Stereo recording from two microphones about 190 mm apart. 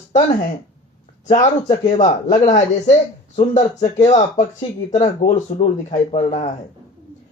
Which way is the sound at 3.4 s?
40° left (ahead or behind).